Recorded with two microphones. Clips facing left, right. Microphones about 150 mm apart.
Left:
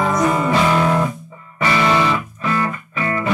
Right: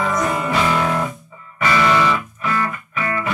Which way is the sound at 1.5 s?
25° left (ahead or behind).